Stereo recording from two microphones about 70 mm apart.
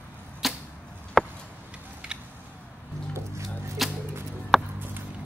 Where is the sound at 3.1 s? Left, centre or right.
Right.